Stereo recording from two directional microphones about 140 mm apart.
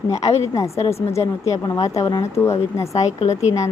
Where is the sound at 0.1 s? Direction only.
50° left (ahead or behind).